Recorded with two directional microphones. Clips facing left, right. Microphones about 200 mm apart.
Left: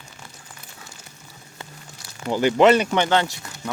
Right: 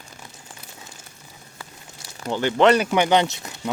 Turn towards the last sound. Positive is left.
turn(degrees=-20)  # may be behind; listen again after turning